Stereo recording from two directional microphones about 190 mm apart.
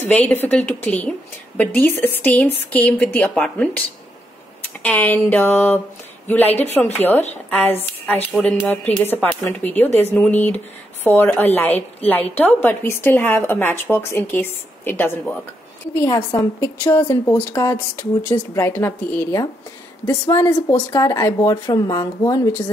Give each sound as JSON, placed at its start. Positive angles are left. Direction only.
{"t": 0.0, "sound": "a woman's voice", "side_deg": 10}
{"t": 4.8, "sound": "a woman's voice", "side_deg": 10}